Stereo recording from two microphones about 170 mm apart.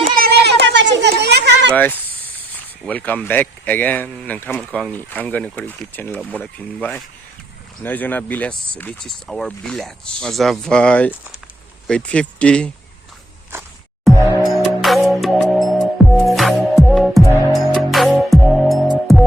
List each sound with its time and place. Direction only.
0.1 s a sound: 65° right (ahead or behind); by 1.7 s 85° right
1.7 s speech: 10° left (ahead or behind)
14.4 s music: centre (ahead or behind)